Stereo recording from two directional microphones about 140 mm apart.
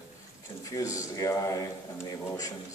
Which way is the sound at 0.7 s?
25° left (ahead or behind).